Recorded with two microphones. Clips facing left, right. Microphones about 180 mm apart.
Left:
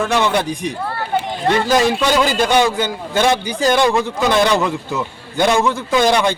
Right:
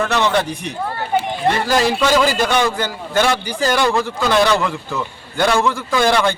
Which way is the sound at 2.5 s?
15° left (ahead or behind).